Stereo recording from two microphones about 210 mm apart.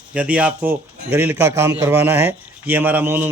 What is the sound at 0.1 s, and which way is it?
A man's voice, 5° right (ahead or behind).